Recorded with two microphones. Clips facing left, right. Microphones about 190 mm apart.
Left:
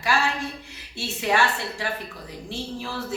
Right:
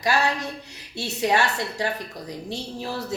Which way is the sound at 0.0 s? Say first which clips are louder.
Right 2 dB; 40° right (ahead or behind).